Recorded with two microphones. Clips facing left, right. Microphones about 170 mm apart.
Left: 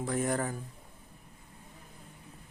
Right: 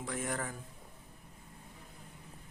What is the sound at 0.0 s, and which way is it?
Speech, 35° left (ahead or behind).